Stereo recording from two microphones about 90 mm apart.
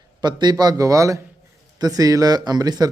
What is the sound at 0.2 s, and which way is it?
Speech, 55° right (ahead or behind).